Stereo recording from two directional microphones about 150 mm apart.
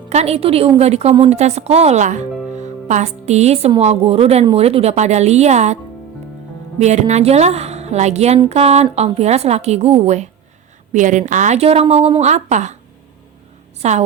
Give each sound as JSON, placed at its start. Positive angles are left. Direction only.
{"t": 0.1, "sound": "a woman's voice", "side_deg": -45}
{"t": 13.8, "sound": "a woman's voice", "side_deg": -45}